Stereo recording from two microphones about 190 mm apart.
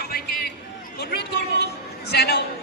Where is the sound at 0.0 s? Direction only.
55° left (ahead or behind).